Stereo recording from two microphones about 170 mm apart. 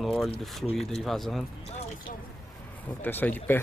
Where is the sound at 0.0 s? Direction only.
Centre (ahead or behind).